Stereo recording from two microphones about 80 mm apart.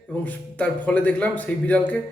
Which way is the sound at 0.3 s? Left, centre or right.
Centre.